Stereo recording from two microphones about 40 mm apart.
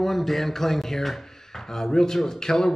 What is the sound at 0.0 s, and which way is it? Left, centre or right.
Speech, centre.